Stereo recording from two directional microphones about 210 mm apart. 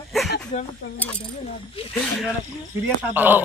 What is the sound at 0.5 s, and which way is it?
Speech, 35° left (ahead or behind).